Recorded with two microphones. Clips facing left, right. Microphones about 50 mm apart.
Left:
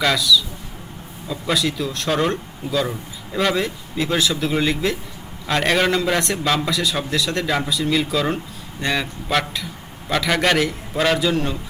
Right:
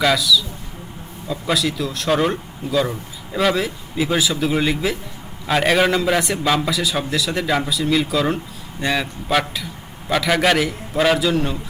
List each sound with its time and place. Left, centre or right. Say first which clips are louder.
0.0 s a man's voice: right 1 dB; centre